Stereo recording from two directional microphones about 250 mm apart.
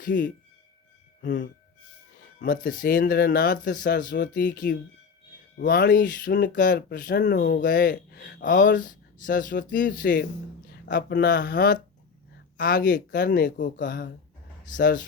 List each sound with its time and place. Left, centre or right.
1.2 s speech: left